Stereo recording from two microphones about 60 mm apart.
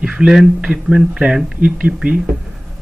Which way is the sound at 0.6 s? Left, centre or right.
Centre.